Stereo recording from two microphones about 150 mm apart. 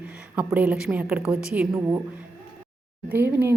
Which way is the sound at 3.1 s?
15° right (ahead or behind).